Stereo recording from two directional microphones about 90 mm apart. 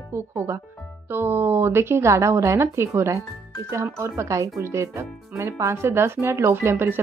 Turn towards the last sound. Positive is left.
turn(degrees=-25)  # may be behind; listen again after turning